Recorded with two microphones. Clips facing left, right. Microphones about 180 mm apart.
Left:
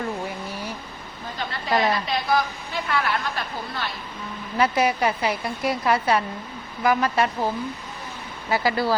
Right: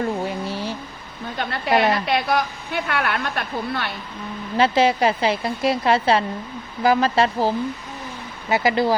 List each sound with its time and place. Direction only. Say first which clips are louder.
0.3 s vehicle: right 5 dB; 25° right (ahead or behind)
1.4 s a sound: right 5 dB; 65° right (ahead or behind)
1.7 s a woman's voice: right 3 dB; 20° right (ahead or behind)
2.0 s a woman's voice: right 2 dB; 65° right (ahead or behind)
4.5 s a woman's voice: right 4 dB; 25° right (ahead or behind)